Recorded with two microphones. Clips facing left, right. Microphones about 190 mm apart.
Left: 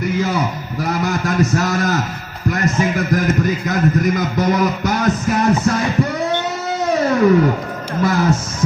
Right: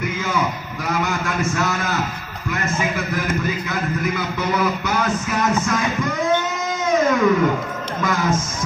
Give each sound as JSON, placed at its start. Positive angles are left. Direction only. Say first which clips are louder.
{"t": 0.0, "sound": "a man's voice", "louder": "left 4 dB", "side_deg": 40}
{"t": 6.9, "sound": "music", "louder": "left 2 dB", "side_deg": 35}
{"t": 8.0, "sound": "a sound", "louder": "left 5 dB", "side_deg": 35}